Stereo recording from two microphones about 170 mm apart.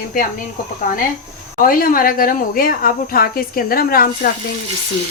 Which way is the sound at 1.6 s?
55° left (ahead or behind).